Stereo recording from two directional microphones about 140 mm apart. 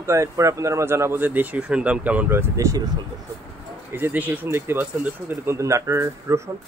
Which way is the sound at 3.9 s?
15° right (ahead or behind).